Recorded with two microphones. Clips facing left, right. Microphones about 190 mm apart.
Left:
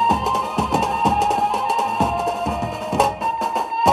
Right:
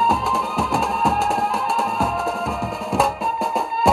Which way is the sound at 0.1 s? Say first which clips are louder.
Left 1 dB; centre (ahead or behind).